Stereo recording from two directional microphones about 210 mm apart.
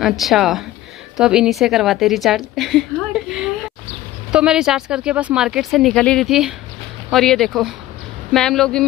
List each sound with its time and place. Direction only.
0.0 s a woman's voice: centre (ahead or behind)